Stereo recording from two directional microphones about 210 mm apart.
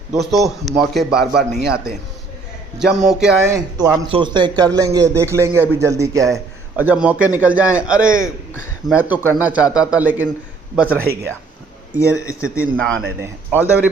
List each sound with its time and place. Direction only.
0.3 s a man's voice: centre (ahead or behind)
3.5 s speech: 15° right (ahead or behind)
11.9 s speech: 15° left (ahead or behind)
12.5 s a man's voice: 5° left (ahead or behind)
13.2 s speech: 10° right (ahead or behind)